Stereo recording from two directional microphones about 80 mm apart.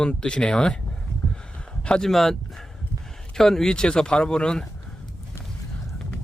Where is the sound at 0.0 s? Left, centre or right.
Centre.